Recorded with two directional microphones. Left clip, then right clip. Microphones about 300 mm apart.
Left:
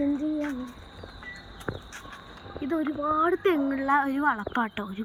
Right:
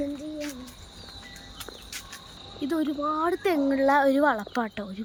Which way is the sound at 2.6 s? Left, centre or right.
Centre.